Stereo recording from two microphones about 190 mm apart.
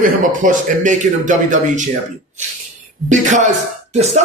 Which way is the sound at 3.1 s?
40° right (ahead or behind).